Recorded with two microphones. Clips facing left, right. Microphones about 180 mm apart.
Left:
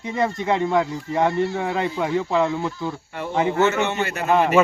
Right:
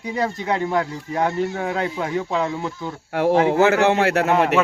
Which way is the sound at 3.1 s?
90° right.